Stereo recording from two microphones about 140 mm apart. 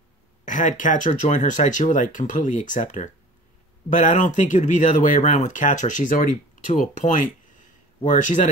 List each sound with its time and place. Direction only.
0.5 s speech: 65° left (ahead or behind)